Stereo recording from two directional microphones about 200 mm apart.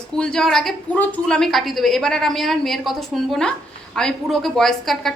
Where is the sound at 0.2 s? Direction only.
5° left (ahead or behind).